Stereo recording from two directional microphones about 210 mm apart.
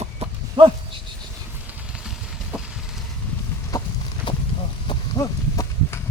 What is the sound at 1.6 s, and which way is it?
Vehicle, 5° right (ahead or behind).